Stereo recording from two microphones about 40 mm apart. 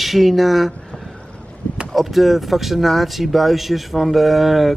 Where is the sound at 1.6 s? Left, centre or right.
Left.